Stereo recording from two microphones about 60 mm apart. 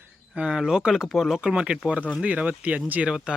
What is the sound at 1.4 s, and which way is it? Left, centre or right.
Speech, centre.